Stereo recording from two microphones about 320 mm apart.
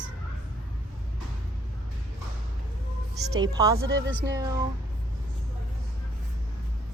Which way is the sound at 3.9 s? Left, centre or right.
Right.